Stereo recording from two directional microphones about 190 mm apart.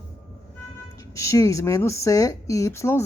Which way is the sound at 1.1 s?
15° left (ahead or behind).